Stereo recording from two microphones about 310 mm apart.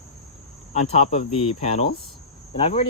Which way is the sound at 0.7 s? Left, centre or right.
Left.